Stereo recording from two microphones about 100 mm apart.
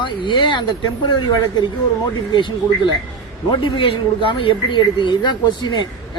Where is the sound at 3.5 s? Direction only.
60° left (ahead or behind).